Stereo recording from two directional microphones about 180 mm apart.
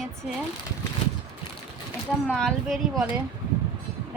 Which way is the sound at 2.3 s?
5° left (ahead or behind).